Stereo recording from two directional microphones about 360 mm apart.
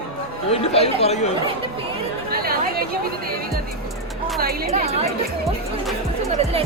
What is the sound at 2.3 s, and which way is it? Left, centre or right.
Speech, right.